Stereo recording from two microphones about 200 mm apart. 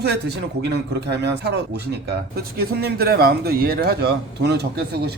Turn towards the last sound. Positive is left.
turn(degrees=-55)  # may be behind; listen again after turning